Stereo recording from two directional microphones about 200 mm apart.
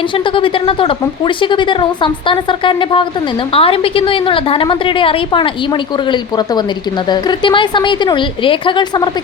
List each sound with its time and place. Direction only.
0.3 s a woman's voice: 25° left (ahead or behind)
7.1 s a woman's voice: 20° left (ahead or behind)